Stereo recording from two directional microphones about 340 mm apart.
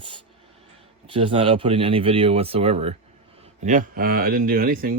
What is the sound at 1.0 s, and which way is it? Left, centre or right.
Speech, centre.